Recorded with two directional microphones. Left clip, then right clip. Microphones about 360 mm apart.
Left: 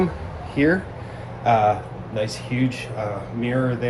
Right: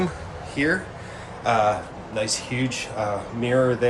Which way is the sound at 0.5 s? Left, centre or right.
Centre.